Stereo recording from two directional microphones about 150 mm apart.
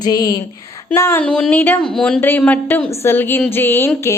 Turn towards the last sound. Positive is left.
turn(degrees=15)  # may be behind; listen again after turning